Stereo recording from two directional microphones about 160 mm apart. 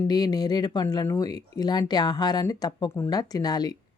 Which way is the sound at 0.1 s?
25° left (ahead or behind).